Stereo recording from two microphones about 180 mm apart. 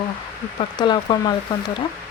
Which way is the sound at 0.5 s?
25° left (ahead or behind).